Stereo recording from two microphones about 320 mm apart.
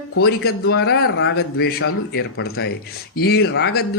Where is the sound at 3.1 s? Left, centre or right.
Left.